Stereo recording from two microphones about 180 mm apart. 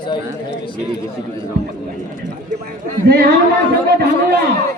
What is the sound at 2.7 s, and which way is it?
Speech, 60° right (ahead or behind).